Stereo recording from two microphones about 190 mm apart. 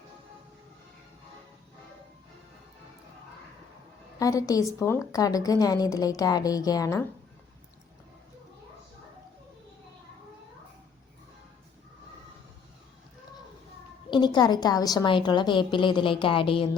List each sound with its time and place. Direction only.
4.2 s a woman's voice: 20° left (ahead or behind)
14.1 s a woman's voice: 25° left (ahead or behind)